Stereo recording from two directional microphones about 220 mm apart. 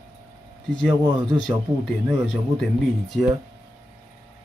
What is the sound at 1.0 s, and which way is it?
Speech, 20° right (ahead or behind).